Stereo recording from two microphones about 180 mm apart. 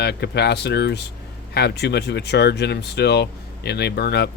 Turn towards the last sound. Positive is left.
turn(degrees=60)  # may be behind; listen again after turning